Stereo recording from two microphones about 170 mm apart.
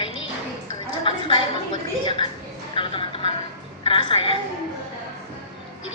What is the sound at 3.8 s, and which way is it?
Music, 30° left (ahead or behind).